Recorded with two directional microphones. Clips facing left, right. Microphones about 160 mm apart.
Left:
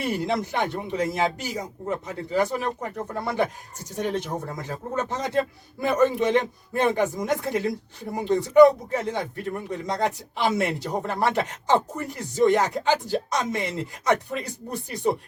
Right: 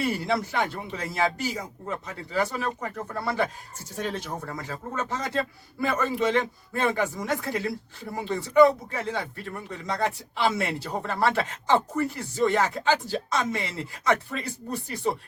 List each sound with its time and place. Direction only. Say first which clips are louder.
0.0 s a man's voice: left 1 dB; 20° left (ahead or behind)